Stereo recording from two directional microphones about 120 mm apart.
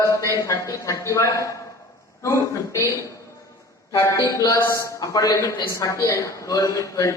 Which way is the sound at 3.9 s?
30° left (ahead or behind).